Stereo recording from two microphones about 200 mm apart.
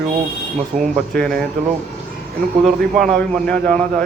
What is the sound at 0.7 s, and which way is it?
Speech, 40° right (ahead or behind).